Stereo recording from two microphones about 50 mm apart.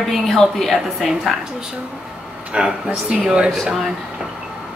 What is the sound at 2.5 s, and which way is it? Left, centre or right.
Speech, centre.